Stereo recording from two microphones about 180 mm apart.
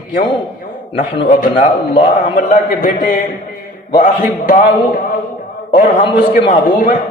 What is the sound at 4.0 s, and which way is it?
Speech, 50° left (ahead or behind).